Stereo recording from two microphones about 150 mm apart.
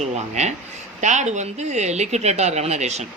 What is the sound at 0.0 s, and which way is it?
Speech, 50° right (ahead or behind).